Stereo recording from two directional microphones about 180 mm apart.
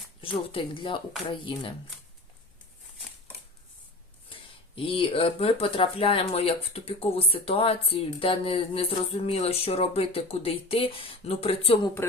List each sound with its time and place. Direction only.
0.2 s speech: 30° left (ahead or behind)
4.3 s speech: 30° left (ahead or behind)